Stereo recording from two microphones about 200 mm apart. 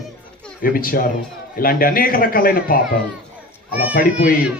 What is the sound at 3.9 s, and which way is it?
Speech, 45° left (ahead or behind).